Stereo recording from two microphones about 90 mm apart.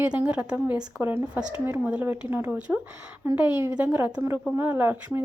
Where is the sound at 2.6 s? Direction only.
15° right (ahead or behind).